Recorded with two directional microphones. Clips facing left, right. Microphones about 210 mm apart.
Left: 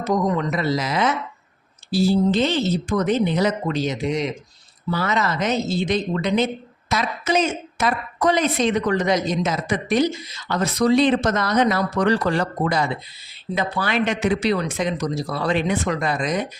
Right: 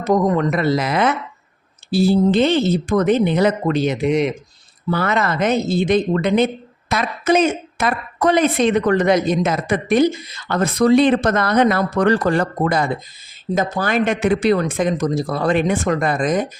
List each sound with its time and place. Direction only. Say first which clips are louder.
0.0 s speech: right 5 dB; 55° right (ahead or behind)